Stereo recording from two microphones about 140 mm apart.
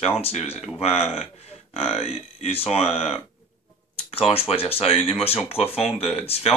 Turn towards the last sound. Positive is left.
turn(degrees=45)  # may be behind; listen again after turning